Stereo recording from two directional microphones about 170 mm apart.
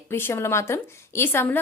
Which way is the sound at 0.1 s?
15° left (ahead or behind).